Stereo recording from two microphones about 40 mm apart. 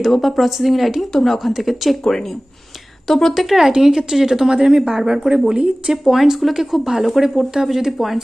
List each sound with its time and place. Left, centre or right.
0.0 s speech: centre
2.0 s speech: centre
3.3 s speech: centre
5.5 s speech: right
6.0 s speech: centre